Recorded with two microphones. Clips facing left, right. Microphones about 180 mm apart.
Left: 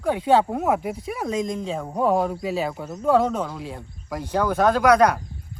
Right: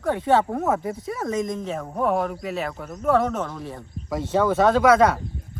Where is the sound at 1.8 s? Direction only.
15° left (ahead or behind).